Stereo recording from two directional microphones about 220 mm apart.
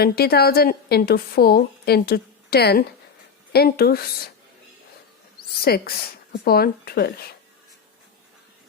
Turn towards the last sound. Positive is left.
turn(degrees=45)  # may be behind; listen again after turning